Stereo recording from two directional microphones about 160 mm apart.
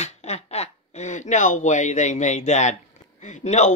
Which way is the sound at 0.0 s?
45° left (ahead or behind).